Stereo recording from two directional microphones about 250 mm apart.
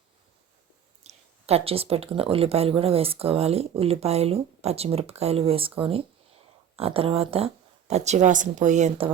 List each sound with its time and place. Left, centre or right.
1.0 s speech: right